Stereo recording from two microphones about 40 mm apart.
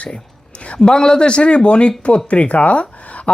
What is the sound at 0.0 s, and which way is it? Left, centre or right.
Speech, left.